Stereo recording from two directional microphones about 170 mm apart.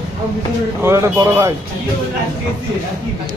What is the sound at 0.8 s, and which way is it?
Speech, 15° right (ahead or behind).